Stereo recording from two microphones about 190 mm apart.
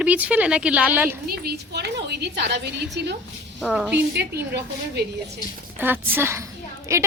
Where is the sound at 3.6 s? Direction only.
Centre (ahead or behind).